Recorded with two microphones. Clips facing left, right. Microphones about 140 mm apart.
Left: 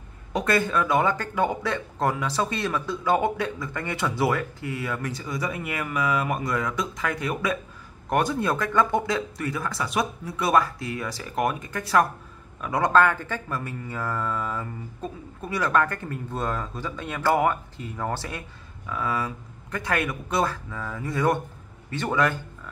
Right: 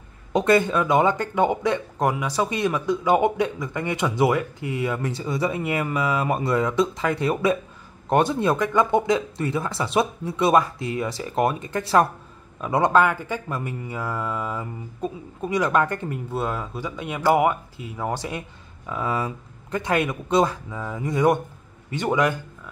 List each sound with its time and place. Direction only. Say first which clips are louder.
0.3 s speech: right 5 dB; 20° right (ahead or behind)
16.3 s speech: right 1 dB; 10° right (ahead or behind)